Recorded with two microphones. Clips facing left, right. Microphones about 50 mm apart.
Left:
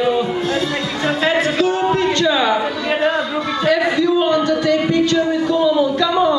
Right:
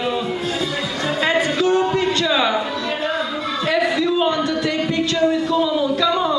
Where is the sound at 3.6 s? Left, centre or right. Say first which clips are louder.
Left 3 dB; centre.